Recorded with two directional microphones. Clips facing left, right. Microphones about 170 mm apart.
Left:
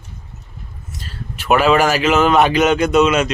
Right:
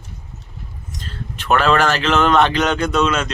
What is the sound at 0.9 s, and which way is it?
Speech, 10° left (ahead or behind).